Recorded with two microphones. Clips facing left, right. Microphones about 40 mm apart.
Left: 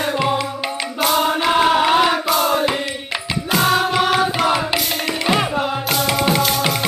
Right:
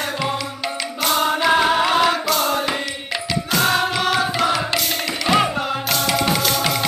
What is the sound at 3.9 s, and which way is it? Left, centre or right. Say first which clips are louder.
Music: left 3 dB; centre.